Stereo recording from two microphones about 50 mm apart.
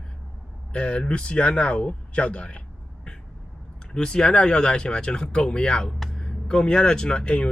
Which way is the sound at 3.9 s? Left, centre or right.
Centre.